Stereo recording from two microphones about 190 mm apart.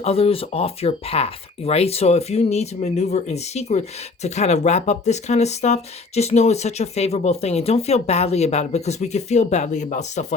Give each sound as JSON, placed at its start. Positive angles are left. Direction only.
{"t": 0.0, "sound": "speech", "side_deg": 30}